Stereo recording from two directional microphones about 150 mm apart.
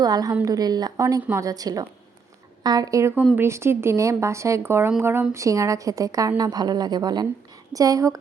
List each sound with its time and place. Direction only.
0.0 s speech: 25° right (ahead or behind)